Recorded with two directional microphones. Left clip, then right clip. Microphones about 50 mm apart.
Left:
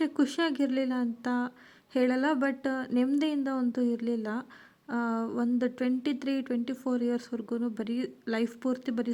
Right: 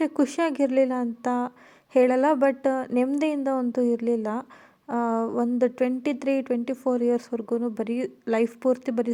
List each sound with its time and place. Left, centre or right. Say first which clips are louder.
0.0 s a woman's voice: right 4 dB; right